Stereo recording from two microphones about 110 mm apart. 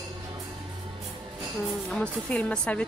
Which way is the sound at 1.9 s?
10° left (ahead or behind).